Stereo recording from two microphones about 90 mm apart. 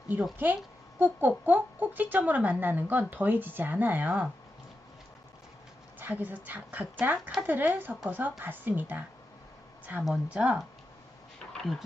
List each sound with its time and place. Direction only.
0.3 s speech: 20° right (ahead or behind)
6.0 s speech: 20° right (ahead or behind)
10.2 s speech: 15° right (ahead or behind)
11.5 s dog: centre (ahead or behind)